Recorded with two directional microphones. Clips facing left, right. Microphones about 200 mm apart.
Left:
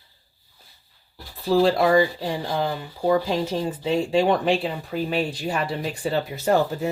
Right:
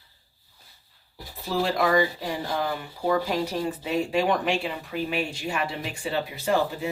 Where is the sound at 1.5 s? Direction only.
35° left (ahead or behind).